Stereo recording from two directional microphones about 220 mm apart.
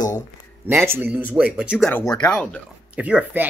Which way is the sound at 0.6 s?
10° right (ahead or behind).